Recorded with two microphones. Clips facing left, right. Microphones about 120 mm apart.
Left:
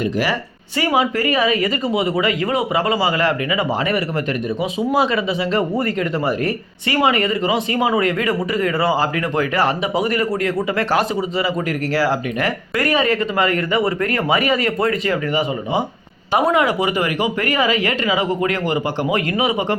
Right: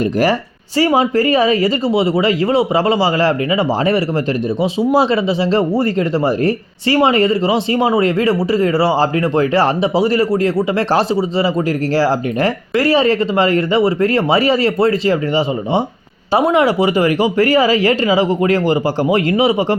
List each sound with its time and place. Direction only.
0.8 s speech: 35° right (ahead or behind)